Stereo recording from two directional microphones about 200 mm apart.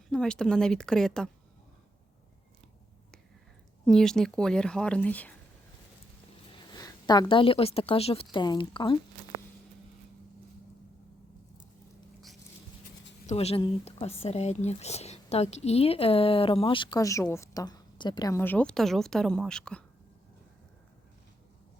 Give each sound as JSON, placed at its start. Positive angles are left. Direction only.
{"t": 0.1, "sound": "speech", "side_deg": 5}
{"t": 3.8, "sound": "speech", "side_deg": 5}
{"t": 6.5, "sound": "a woman's voice", "side_deg": 20}
{"t": 13.2, "sound": "speech", "side_deg": 30}